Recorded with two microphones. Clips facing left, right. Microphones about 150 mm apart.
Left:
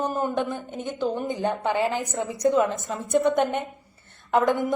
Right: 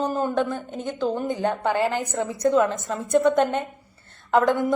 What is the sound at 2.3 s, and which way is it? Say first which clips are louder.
Speech: right 1 dB; 20° left (ahead or behind).